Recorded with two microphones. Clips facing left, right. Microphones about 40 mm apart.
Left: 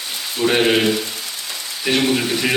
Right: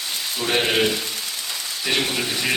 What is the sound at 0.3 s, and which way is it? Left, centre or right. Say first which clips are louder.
Speech: left 6 dB; centre.